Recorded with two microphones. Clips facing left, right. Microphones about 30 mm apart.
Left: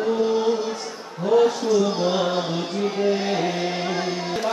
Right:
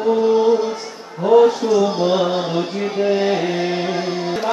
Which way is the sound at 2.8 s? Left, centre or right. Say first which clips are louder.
Right 4 dB; centre.